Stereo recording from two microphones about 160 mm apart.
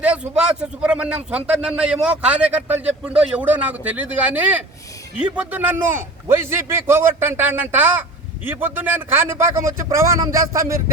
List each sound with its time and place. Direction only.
0.0 s speech: 5° right (ahead or behind)